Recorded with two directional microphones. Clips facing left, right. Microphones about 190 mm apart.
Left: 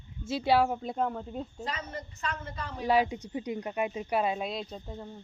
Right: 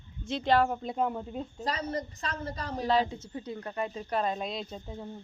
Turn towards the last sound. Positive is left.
turn(degrees=0)  # may be behind; listen again after turning